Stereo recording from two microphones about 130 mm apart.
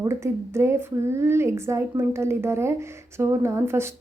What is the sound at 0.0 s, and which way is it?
Speech, 20° right (ahead or behind).